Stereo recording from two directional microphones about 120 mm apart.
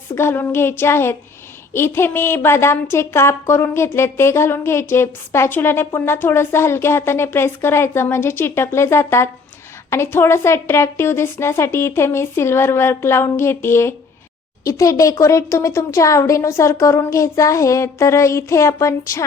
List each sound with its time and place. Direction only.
0.1 s speech: 20° left (ahead or behind)